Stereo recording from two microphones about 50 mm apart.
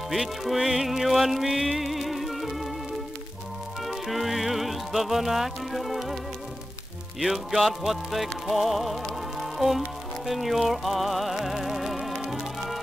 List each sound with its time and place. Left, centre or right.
0.1 s music: centre
3.8 s music: centre
7.2 s music: centre